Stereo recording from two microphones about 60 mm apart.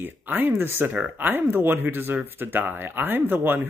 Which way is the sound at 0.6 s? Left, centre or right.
Right.